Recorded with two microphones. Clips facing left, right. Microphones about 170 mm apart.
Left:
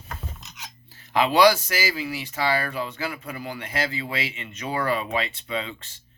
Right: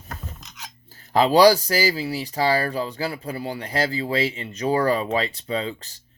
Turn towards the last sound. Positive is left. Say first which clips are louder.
# right 4 dB
turn(degrees=-35)  # may be behind; listen again after turning